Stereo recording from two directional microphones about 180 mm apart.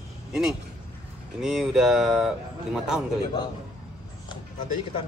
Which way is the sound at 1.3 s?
Centre (ahead or behind).